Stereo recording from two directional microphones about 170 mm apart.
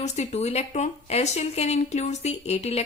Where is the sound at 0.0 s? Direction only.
40° left (ahead or behind).